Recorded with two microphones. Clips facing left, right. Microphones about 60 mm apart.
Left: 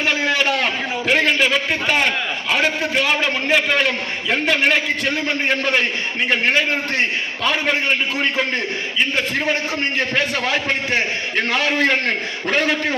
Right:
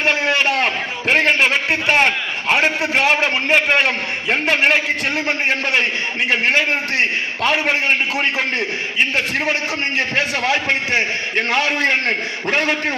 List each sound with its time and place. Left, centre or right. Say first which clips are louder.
0.0 s a sound: right 2 dB; right
1.7 s a man's voice: right 3 dB; right
6.4 s a man's voice: right 1 dB; right
11.8 s a man's voice: even; right